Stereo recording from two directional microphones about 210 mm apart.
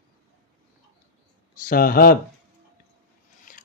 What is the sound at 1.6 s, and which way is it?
Speech, 45° left (ahead or behind).